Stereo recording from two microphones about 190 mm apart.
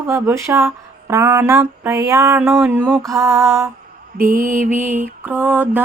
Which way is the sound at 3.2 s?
15° right (ahead or behind).